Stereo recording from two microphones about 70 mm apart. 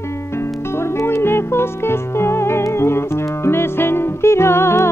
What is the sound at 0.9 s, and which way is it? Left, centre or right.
Music, left.